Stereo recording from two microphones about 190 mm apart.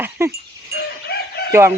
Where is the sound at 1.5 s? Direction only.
15° right (ahead or behind).